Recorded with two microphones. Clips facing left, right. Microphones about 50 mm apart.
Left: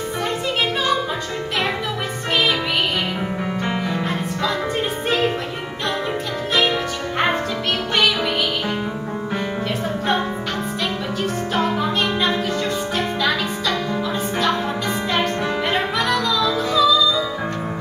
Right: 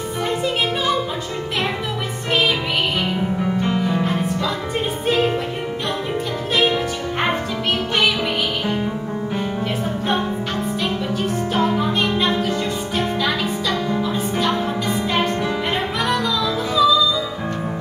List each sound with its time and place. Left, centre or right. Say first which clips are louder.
12.4 s music: even; centre
15.7 s music: left 1 dB; centre